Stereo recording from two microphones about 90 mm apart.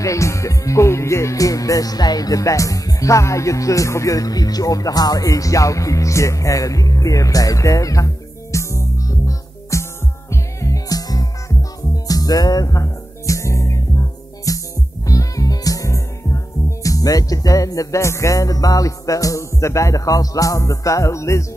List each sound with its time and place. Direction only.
0.0 s speech: 35° left (ahead or behind)
10.3 s music: 35° left (ahead or behind)
16.6 s speech: 40° left (ahead or behind)